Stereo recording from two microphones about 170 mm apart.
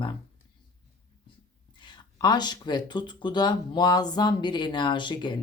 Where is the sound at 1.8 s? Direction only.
25° left (ahead or behind).